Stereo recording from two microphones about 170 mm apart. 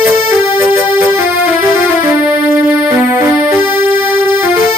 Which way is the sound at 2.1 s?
15° right (ahead or behind).